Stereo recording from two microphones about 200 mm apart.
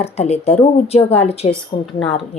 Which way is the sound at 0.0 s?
35° left (ahead or behind).